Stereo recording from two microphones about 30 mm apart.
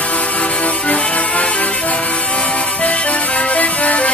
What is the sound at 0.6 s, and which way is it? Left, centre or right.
Music, left.